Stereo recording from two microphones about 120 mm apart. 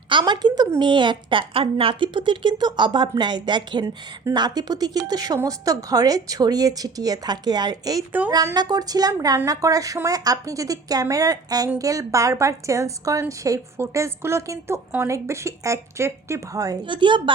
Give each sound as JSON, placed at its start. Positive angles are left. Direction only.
{"t": 0.1, "sound": "a woman's voice", "side_deg": -40}
{"t": 16.8, "sound": "a woman's voice", "side_deg": -40}